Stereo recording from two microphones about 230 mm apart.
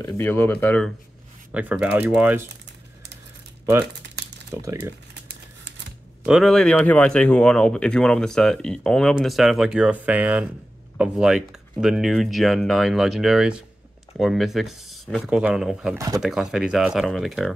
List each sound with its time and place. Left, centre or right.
0.0 s speech: centre
1.5 s speech: centre
4.6 s speech: centre
5.3 s typewriter: right
6.2 s speech: centre